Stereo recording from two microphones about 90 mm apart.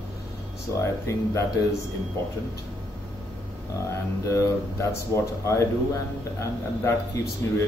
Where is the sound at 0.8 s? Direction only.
35° left (ahead or behind).